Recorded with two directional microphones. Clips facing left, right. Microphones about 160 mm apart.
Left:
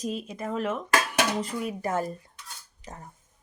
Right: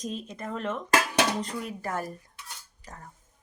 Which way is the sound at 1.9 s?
20° left (ahead or behind).